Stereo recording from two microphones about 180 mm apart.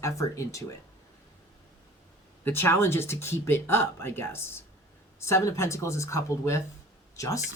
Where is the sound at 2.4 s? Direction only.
15° left (ahead or behind).